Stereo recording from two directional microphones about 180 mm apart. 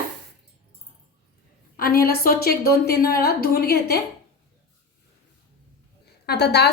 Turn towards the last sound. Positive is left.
turn(degrees=65)  # may be behind; listen again after turning